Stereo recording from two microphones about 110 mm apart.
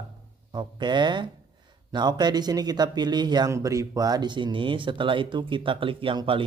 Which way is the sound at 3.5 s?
30° right (ahead or behind).